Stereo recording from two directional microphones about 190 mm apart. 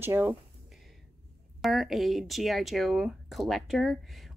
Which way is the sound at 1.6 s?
Centre (ahead or behind).